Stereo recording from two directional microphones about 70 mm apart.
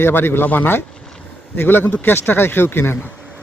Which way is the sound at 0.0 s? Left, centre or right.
Left.